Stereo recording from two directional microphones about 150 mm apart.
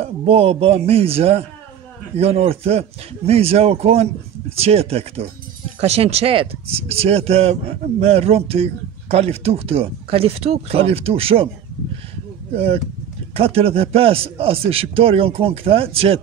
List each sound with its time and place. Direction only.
0.0 s a man's voice: 40° right (ahead or behind)
13.3 s a man's voice: 40° right (ahead or behind)